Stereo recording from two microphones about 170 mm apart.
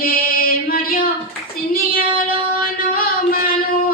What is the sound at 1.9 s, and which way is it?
Singing, 60° left (ahead or behind).